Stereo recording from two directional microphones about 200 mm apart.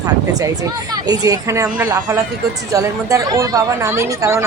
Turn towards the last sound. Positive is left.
turn(degrees=-15)  # may be behind; listen again after turning